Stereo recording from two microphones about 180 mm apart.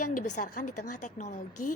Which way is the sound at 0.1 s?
45° left (ahead or behind).